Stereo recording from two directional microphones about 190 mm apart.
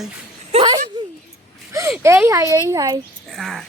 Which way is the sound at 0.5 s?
35° right (ahead or behind).